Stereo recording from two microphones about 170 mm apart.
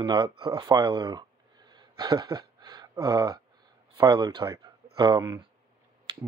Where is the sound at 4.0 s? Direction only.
25° right (ahead or behind).